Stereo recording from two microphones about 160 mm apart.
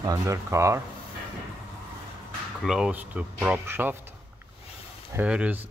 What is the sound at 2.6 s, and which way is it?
Speech, 5° right (ahead or behind).